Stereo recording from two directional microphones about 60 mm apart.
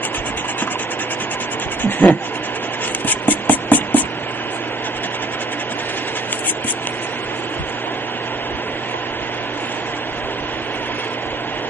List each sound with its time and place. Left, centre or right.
1.8 s speech: left
3.1 s music: left